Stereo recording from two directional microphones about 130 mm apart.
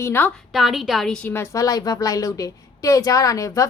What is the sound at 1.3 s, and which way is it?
A woman's voice, 20° left (ahead or behind).